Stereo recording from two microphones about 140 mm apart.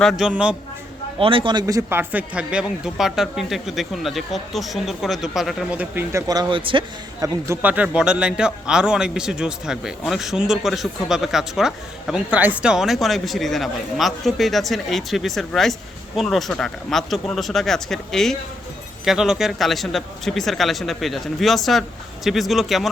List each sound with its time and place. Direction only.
0.0 s speech: centre (ahead or behind)
1.2 s a man's voice: 40° right (ahead or behind)
1.6 s speech: 20° right (ahead or behind); by 6.8 s 35° right (ahead or behind)
7.2 s speech: 20° right (ahead or behind); by 22.9 s centre (ahead or behind)